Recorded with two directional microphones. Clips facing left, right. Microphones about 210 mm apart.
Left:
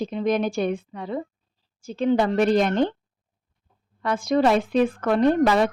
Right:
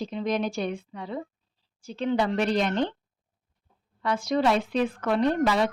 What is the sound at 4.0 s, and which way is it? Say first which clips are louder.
Speech: left 4 dB; 50° left (ahead or behind).